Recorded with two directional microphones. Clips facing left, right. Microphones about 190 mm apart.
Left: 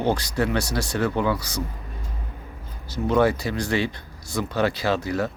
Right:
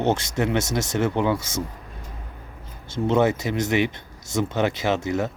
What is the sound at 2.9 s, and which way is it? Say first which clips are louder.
Speech: even; 25° right (ahead or behind).